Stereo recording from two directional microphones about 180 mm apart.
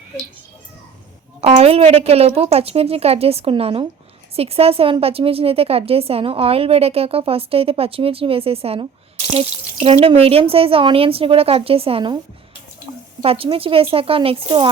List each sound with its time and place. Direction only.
1.4 s a woman's voice: 35° right (ahead or behind)
13.2 s a woman's voice: 30° right (ahead or behind)